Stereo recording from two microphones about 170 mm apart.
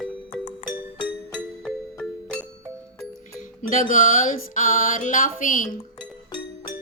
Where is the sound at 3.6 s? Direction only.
50° left (ahead or behind).